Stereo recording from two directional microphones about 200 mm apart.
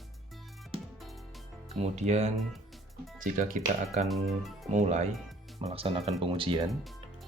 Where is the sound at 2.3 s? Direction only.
Centre (ahead or behind).